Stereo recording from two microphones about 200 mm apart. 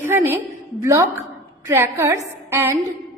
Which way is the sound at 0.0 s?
10° right (ahead or behind).